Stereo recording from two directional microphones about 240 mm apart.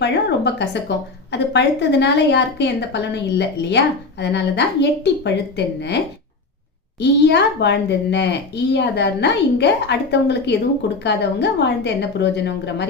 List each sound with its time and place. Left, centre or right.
0.0 s a woman's voice: left
7.0 s a woman's voice: left